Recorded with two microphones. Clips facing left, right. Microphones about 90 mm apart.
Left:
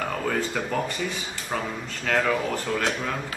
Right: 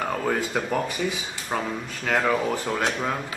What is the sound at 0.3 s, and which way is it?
Speech, 10° right (ahead or behind).